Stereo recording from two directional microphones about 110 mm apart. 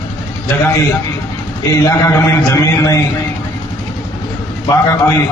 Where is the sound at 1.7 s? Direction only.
30° left (ahead or behind).